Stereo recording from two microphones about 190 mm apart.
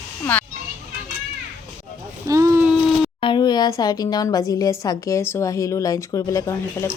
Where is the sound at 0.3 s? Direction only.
10° left (ahead or behind).